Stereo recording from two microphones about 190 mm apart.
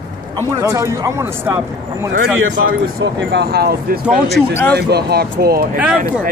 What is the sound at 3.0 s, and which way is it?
Speech, 70° right (ahead or behind).